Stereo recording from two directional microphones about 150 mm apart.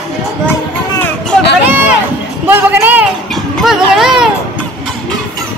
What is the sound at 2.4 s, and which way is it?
Speech, 15° right (ahead or behind).